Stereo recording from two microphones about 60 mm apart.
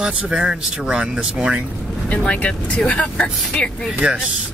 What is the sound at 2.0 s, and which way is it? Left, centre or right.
Speech, left.